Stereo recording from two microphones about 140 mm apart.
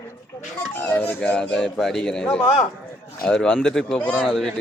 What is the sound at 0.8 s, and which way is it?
Speech, 10° left (ahead or behind).